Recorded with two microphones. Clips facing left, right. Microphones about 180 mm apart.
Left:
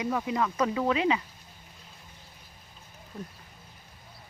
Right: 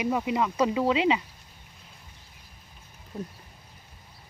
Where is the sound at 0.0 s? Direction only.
20° right (ahead or behind).